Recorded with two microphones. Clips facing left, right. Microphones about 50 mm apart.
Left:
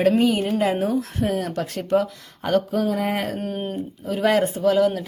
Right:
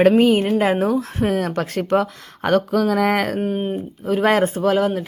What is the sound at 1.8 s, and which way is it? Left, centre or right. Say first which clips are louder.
Speech: left 1 dB; right.